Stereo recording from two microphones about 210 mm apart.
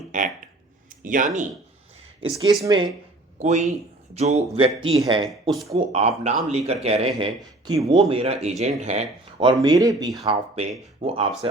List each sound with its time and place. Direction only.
0.1 s speech: 35° right (ahead or behind)
0.9 s a sound: 40° right (ahead or behind)
2.4 s speech: 20° right (ahead or behind)
3.3 s speech: 35° right (ahead or behind)
5.3 s speech: centre (ahead or behind)
5.6 s speech: 30° right (ahead or behind)
10.2 s speech: 30° right (ahead or behind)